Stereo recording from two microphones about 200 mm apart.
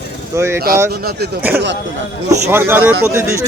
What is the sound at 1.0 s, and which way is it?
Speech, 50° right (ahead or behind).